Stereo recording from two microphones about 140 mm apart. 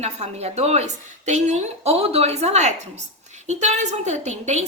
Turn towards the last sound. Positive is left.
turn(degrees=-55)  # may be behind; listen again after turning